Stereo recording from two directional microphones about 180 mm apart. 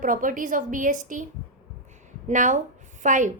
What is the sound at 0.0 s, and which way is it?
Speech, 50° right (ahead or behind).